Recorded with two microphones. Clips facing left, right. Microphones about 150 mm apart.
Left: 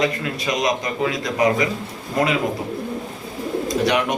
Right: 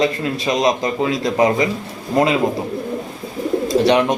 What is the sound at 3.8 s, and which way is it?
Speech, 30° right (ahead or behind).